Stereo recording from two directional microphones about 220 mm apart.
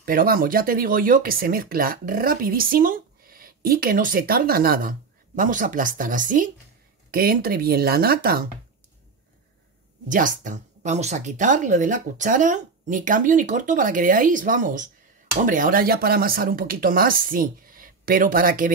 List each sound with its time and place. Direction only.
0.0 s speech: 40° right (ahead or behind)
10.0 s speech: 35° right (ahead or behind)